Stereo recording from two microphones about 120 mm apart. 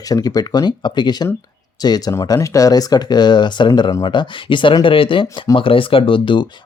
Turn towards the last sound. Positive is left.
turn(degrees=45)  # may be behind; listen again after turning